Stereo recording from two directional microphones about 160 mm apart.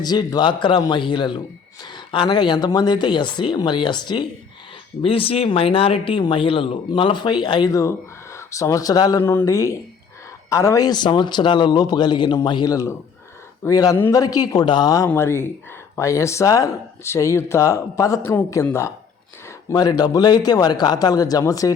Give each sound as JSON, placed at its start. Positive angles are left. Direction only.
{"t": 0.0, "sound": "speech", "side_deg": 25}